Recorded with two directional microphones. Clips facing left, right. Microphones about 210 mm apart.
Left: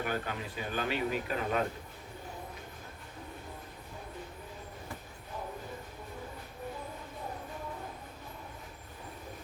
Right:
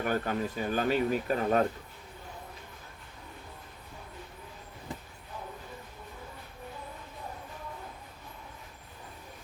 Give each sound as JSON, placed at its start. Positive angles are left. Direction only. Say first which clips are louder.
{"t": 0.0, "sound": "speech", "louder": "right 5 dB", "side_deg": -45}